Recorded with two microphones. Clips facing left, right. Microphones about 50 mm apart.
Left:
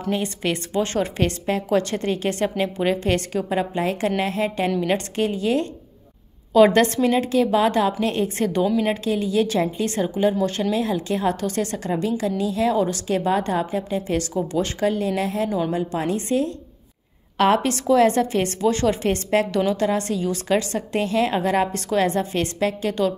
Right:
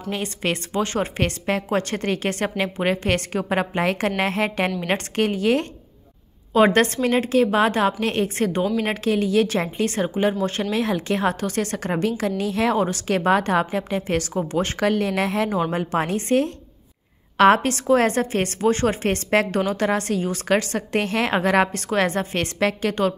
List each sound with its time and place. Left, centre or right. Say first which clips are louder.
0.2 s a woman's voice: even; right
6.5 s a woman's voice: left 2 dB; right
10.4 s a woman's voice: left 1 dB; right
10.7 s a woman's voice: even; right
12.0 s a woman's voice: even; right
14.9 s a woman's voice: right 1 dB; right
15.7 s a woman's voice: right 1 dB; right
17.4 s a woman's voice: right 3 dB; right
19.0 s a woman's voice: even; right